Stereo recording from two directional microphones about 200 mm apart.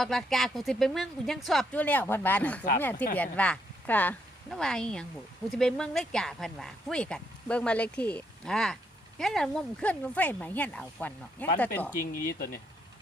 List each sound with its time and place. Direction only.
0.0 s speech: centre (ahead or behind)
12.3 s speech: 50° left (ahead or behind)